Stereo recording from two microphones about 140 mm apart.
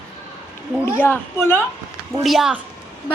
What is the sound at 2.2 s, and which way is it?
Speech, centre (ahead or behind).